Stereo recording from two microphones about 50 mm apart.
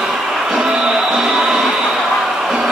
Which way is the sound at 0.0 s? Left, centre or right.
Centre.